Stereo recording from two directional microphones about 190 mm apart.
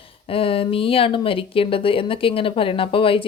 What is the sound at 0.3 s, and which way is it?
Speech, 30° left (ahead or behind).